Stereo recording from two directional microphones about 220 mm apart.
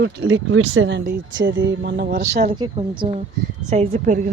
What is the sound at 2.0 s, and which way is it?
Speech, 35° right (ahead or behind).